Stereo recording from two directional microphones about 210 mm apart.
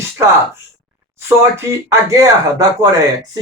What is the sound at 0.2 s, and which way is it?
Speech, 10° right (ahead or behind).